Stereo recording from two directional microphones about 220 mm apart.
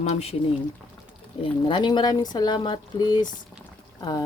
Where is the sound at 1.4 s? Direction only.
20° left (ahead or behind).